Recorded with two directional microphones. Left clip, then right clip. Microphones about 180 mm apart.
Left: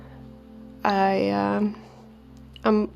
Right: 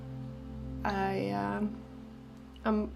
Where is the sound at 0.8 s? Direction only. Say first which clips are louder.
Left 11 dB; 50° left (ahead or behind).